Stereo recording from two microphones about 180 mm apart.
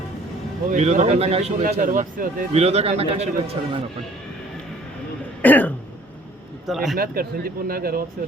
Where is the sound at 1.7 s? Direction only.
50° right (ahead or behind).